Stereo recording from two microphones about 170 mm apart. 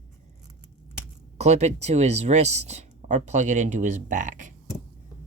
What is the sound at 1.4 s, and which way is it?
Speech, 40° right (ahead or behind).